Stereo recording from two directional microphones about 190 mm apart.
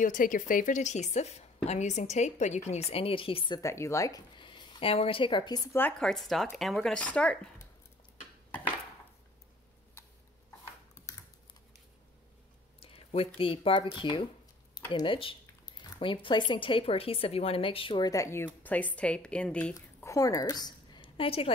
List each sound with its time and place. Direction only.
0.0 s speech: 45° left (ahead or behind); by 5.6 s 25° left (ahead or behind)
5.7 s speech: 10° left (ahead or behind)
12.8 s speech: 30° left (ahead or behind); by 19.7 s 5° left (ahead or behind)
19.7 s a sound: 15° left (ahead or behind)